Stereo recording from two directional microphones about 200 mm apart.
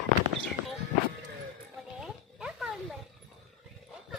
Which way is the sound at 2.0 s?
5° right (ahead or behind).